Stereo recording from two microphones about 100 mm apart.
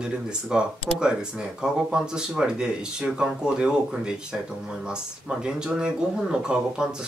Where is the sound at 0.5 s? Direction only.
10° right (ahead or behind).